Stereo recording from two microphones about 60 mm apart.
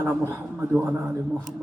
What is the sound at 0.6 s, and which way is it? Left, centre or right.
Speech, right.